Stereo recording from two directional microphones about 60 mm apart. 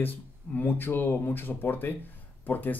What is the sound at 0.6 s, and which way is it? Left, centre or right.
Speech, left.